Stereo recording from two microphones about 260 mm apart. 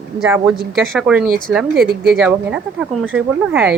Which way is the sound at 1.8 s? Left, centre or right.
Right.